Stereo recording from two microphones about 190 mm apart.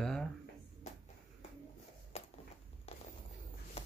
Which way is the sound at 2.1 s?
35° left (ahead or behind).